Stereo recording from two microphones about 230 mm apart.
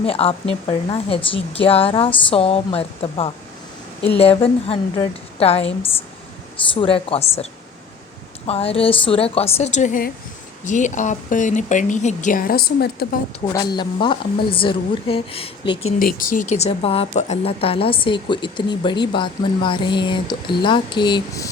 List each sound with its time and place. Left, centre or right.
0.0 s a woman's voice: left
6.7 s a woman's voice: left
8.4 s a woman's voice: left
13.5 s a woman's voice: centre
16.1 s a woman's voice: left; by 21.5 s centre